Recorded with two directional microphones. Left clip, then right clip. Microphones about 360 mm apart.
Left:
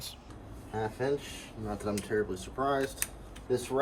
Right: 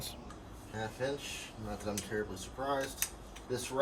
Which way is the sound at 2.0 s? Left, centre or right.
Centre.